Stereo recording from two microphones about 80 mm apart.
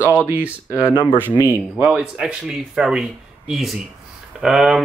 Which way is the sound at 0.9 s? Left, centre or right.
Left.